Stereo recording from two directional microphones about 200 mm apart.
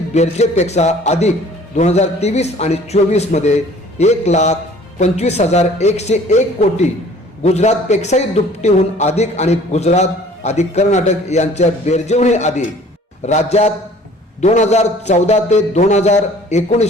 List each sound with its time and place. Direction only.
0.1 s a man's voice: 35° left (ahead or behind)